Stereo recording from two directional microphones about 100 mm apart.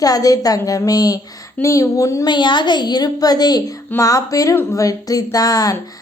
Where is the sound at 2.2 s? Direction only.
50° left (ahead or behind).